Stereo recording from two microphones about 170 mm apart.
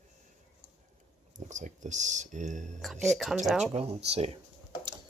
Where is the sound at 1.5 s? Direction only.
45° right (ahead or behind).